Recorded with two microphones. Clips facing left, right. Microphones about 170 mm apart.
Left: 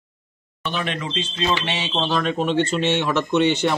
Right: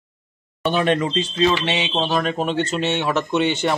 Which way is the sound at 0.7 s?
45° right (ahead or behind).